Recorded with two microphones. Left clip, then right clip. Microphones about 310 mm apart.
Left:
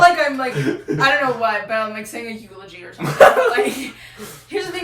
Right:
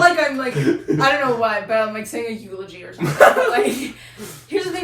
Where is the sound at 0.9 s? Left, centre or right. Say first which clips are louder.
Left 2 dB; centre.